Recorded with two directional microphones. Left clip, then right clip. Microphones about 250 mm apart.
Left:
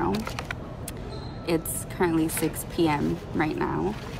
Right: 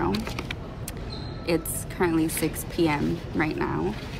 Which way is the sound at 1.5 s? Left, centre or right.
Centre.